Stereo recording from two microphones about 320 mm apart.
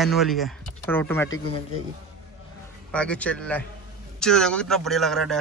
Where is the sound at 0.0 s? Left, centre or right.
Centre.